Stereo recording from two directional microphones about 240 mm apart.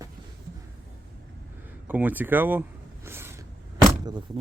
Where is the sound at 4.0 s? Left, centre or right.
Centre.